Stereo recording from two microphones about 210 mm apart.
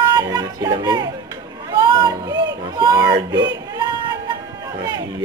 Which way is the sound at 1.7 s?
20° right (ahead or behind).